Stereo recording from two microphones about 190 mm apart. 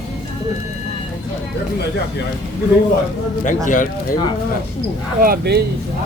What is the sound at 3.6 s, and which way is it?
Speech, 45° left (ahead or behind).